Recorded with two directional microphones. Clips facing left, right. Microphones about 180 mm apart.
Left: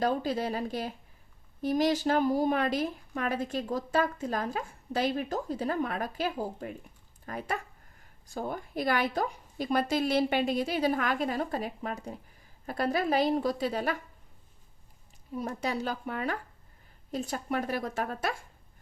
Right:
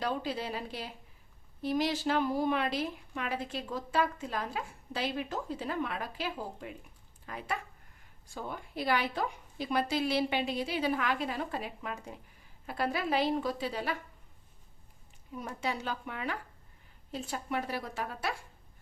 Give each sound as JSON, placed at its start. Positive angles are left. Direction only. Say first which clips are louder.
{"t": 0.0, "sound": "a woman's voice", "louder": "left 5 dB", "side_deg": 45}
{"t": 15.4, "sound": "a woman's voice", "louder": "left 4 dB", "side_deg": 40}